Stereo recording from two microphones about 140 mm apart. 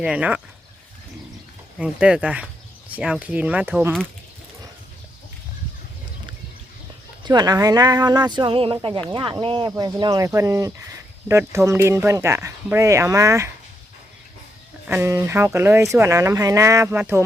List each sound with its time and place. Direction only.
0.0 s speech: 10° right (ahead or behind)
1.8 s speech: 5° right (ahead or behind)
7.3 s speech: 30° right (ahead or behind)
14.8 s speech: 15° right (ahead or behind)